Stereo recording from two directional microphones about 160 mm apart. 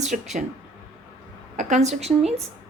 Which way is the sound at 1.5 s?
45° right (ahead or behind).